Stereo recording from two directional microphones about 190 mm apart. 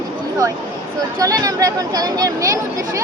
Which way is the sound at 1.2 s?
20° right (ahead or behind).